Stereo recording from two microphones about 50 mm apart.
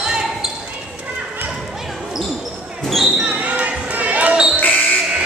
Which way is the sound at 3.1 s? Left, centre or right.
Right.